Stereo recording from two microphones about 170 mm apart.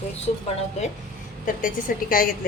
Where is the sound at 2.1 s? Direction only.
55° left (ahead or behind).